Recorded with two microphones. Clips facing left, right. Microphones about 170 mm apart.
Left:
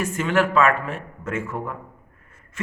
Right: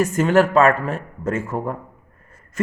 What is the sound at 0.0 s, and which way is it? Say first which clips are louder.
A woman's voice: right 5 dB; 40° right (ahead or behind).